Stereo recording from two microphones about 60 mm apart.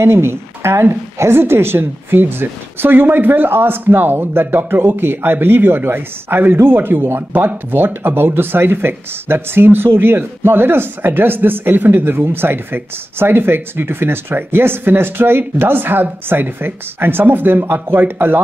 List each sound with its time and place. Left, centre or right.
0.0 s speech: right